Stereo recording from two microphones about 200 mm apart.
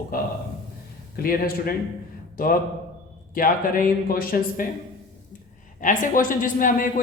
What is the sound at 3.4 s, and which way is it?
A man's voice, 45° left (ahead or behind).